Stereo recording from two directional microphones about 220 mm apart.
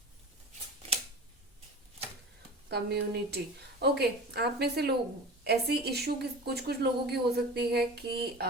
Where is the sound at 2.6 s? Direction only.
50° right (ahead or behind).